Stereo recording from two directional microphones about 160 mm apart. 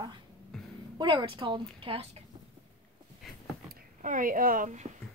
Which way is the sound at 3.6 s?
55° right (ahead or behind).